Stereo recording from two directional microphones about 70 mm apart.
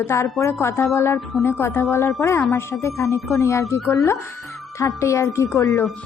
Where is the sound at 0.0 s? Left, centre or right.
Left.